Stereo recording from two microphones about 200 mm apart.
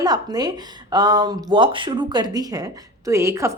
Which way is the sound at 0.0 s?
20° right (ahead or behind).